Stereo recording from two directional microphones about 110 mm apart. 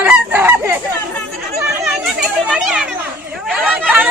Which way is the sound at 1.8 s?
5° right (ahead or behind).